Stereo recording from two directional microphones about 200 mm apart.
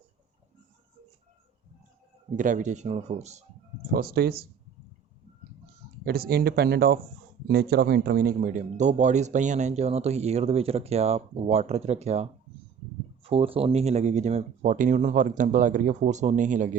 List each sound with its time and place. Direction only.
2.3 s speech: 40° right (ahead or behind)
3.9 s speech: 50° right (ahead or behind)
6.1 s speech: 50° right (ahead or behind)